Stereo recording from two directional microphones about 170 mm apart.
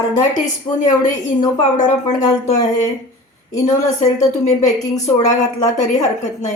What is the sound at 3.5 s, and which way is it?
A woman's voice, 40° left (ahead or behind).